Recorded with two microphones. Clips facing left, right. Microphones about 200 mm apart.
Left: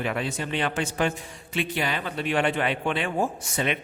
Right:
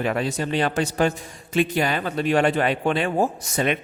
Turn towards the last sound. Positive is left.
turn(degrees=-45)  # may be behind; listen again after turning